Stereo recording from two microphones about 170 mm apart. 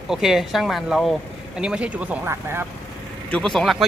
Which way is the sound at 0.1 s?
Centre (ahead or behind).